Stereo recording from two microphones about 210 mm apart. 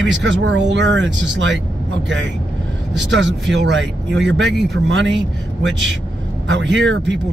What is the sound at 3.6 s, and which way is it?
Speech, 60° right (ahead or behind).